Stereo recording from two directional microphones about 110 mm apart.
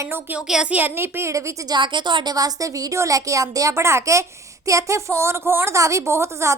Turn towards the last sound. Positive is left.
turn(degrees=-25)  # may be behind; listen again after turning